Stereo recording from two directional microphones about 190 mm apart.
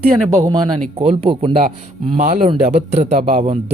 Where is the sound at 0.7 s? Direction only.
35° right (ahead or behind).